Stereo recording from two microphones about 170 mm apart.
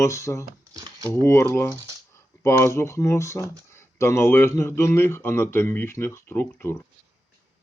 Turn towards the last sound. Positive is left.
turn(degrees=15)  # may be behind; listen again after turning